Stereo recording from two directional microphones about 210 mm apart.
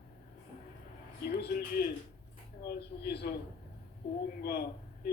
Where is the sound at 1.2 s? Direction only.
50° left (ahead or behind).